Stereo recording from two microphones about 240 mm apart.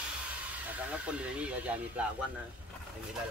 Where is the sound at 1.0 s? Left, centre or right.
Centre.